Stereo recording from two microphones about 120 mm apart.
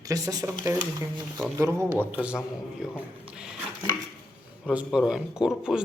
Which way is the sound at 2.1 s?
10° right (ahead or behind).